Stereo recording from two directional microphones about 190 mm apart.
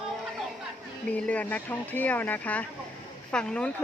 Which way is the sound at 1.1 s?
5° left (ahead or behind).